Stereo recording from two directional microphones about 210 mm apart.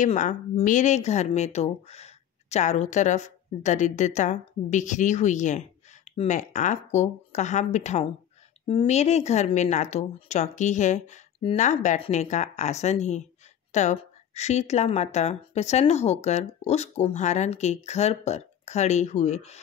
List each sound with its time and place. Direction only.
0.0 s speech: 35° left (ahead or behind)